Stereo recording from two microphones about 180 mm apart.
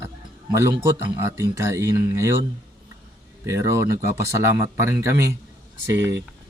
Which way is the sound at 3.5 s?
15° right (ahead or behind).